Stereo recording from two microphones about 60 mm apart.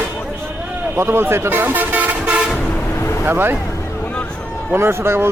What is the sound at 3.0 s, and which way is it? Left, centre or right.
Vehicle, left.